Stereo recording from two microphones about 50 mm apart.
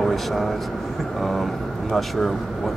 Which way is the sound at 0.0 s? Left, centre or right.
Centre.